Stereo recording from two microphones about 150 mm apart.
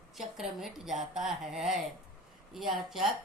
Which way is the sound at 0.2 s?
Centre (ahead or behind).